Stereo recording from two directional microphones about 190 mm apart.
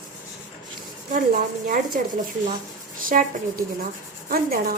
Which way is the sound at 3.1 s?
45° right (ahead or behind).